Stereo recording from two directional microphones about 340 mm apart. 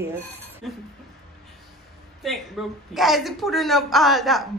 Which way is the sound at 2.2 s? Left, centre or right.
Centre.